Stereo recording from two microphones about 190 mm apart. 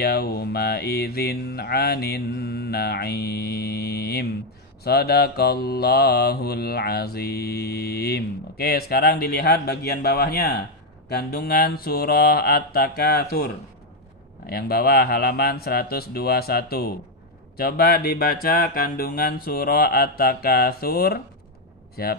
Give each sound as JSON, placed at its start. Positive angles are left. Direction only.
{"t": 0.0, "sound": "mantra", "side_deg": 55}
{"t": 11.1, "sound": "speech", "side_deg": 55}
{"t": 14.4, "sound": "mantra", "side_deg": 55}
{"t": 17.6, "sound": "speech", "side_deg": 55}